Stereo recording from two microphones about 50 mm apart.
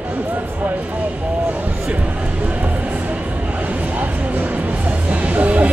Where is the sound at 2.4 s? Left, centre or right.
Right.